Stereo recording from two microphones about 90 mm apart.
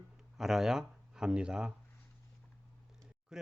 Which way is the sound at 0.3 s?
5° right (ahead or behind).